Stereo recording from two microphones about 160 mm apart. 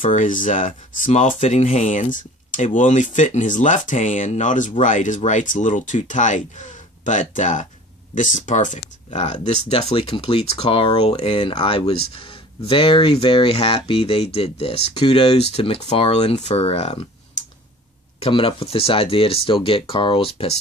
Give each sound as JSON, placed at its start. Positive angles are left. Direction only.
{"t": 0.0, "sound": "speech", "side_deg": 55}
{"t": 18.2, "sound": "speech", "side_deg": 35}